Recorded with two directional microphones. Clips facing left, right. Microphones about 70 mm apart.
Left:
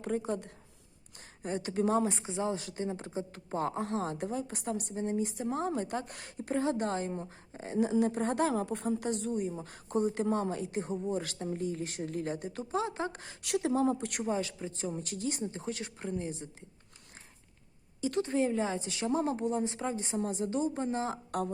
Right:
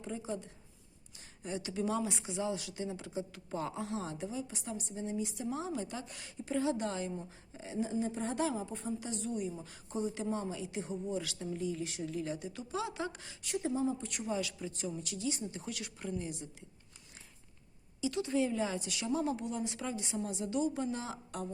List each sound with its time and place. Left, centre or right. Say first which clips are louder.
0.0 s speech: left 6 dB; left
1.4 s speech: left 5 dB; left
7.8 s speech: left 7 dB; left
10.2 s speech: left 6 dB; left
13.4 s speech: left 5 dB; left
14.3 s a woman's voice: left 2 dB; left
15.5 s a woman's voice: left 4 dB; left
18.0 s a woman's voice: left 3 dB; left